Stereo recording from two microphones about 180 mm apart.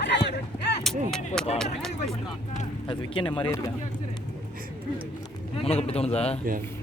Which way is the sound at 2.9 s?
30° left (ahead or behind).